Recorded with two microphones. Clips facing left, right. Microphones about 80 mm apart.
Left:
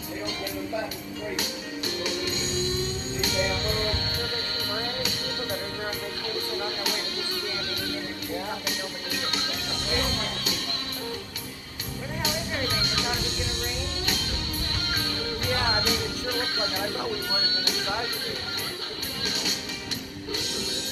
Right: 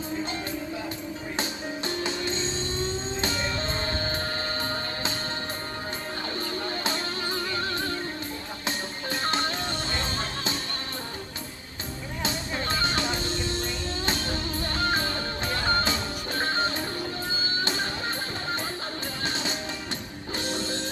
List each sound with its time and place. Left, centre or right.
1.4 s music: right
6.5 s music: right
12.2 s music: right